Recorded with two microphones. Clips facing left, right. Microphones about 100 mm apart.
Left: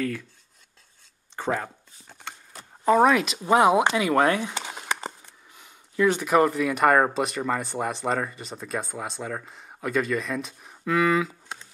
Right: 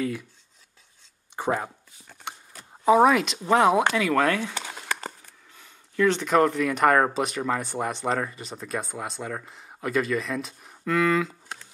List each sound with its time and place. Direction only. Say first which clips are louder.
1.3 s speech: right 1 dB; 15° right (ahead or behind)
2.8 s speech: right 1 dB; 5° right (ahead or behind)